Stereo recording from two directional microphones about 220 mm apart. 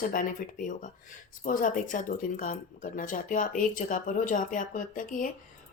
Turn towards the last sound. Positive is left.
turn(degrees=35)  # may be behind; listen again after turning